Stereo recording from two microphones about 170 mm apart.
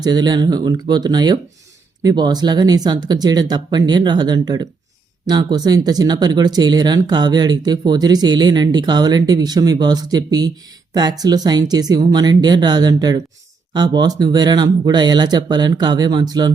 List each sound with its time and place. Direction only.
0.0 s speech: 25° right (ahead or behind)